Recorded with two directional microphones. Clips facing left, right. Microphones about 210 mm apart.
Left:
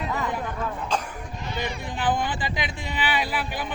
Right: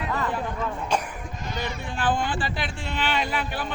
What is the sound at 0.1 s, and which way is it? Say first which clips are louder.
Speech: right 2 dB; 10° left (ahead or behind).